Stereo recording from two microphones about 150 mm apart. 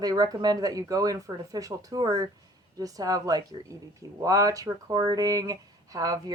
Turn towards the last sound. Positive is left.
turn(degrees=-25)  # may be behind; listen again after turning